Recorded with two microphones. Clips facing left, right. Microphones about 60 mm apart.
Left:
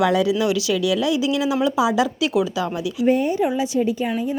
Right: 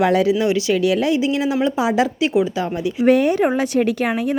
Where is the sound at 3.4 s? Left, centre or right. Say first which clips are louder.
Right 3 dB; right.